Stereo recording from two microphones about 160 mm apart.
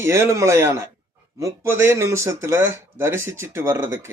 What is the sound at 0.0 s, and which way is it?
A man's voice, 15° right (ahead or behind).